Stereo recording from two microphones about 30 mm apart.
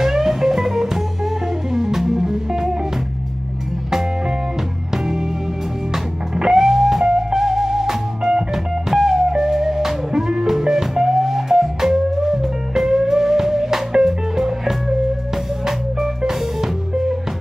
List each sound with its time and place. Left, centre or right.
0.0 s music: centre
4.9 s music: centre
6.3 s music: centre
7.1 s music: right